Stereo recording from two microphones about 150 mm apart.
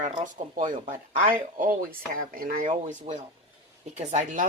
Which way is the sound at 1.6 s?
70° right (ahead or behind).